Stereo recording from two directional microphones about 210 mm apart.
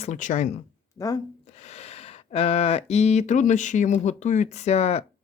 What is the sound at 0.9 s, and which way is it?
Speech, 15° left (ahead or behind).